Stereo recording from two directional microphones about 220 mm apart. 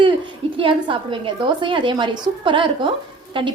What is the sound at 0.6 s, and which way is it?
A woman's voice, 25° right (ahead or behind).